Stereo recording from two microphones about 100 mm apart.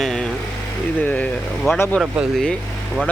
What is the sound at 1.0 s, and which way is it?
Speech, 20° left (ahead or behind).